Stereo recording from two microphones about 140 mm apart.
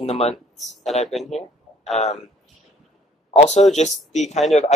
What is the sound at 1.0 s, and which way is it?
Speech, centre (ahead or behind).